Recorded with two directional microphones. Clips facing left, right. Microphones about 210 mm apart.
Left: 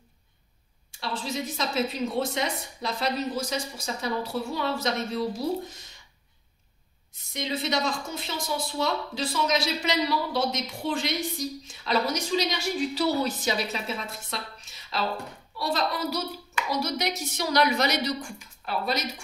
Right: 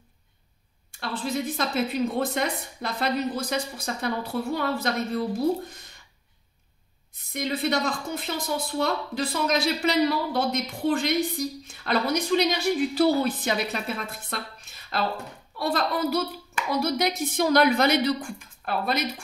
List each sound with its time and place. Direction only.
0.9 s speech: 55° right (ahead or behind)
7.3 s speech: 55° right (ahead or behind)